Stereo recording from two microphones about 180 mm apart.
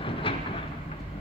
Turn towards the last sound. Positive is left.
turn(degrees=30)  # may be behind; listen again after turning